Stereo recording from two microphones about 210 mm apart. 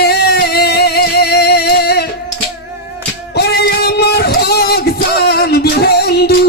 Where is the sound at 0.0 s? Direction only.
50° left (ahead or behind).